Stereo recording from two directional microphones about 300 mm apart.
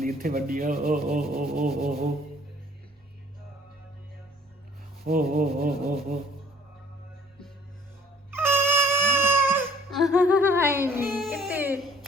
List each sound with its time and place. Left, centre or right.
0.0 s rub: right
5.0 s rub: right
8.3 s crying: centre